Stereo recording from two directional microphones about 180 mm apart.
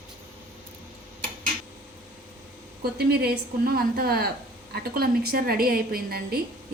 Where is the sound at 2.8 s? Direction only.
60° right (ahead or behind).